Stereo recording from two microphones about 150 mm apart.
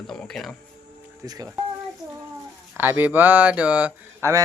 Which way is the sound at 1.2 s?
25° right (ahead or behind).